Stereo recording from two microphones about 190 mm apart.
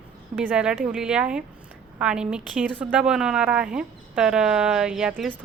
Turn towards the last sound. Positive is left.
turn(degrees=-5)  # may be behind; listen again after turning